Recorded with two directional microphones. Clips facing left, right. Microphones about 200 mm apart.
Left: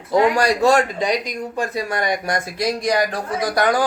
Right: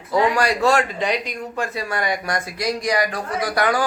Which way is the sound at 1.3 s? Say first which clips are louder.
Left 2 dB; 15° left (ahead or behind).